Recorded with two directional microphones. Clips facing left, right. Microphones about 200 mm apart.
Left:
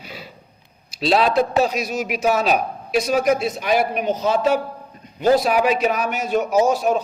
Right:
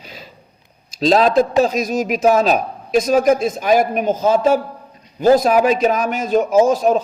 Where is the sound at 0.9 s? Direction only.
40° right (ahead or behind).